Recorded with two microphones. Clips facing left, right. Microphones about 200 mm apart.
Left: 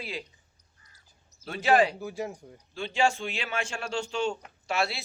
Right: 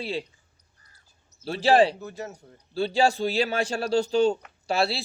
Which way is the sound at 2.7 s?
35° right (ahead or behind).